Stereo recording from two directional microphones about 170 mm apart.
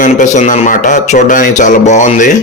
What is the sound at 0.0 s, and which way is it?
A man's voice, 45° left (ahead or behind).